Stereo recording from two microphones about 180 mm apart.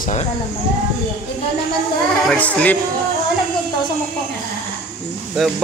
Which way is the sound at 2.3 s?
5° left (ahead or behind).